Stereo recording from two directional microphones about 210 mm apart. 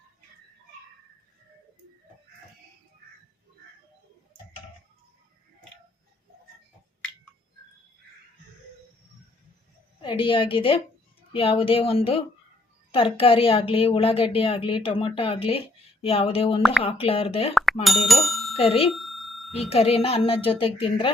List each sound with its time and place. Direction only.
10.0 s a woman's voice: 25° left (ahead or behind)
17.5 s bicycle bell: centre (ahead or behind)
17.8 s speech: centre (ahead or behind)
18.5 s a woman's voice: 25° left (ahead or behind)
18.9 s a sound: centre (ahead or behind)
19.7 s a woman's voice: 30° left (ahead or behind)